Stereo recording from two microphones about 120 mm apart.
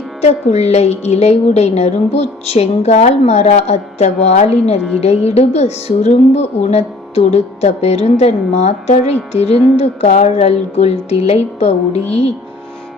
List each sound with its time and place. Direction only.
0.2 s a woman's voice: 65° left (ahead or behind)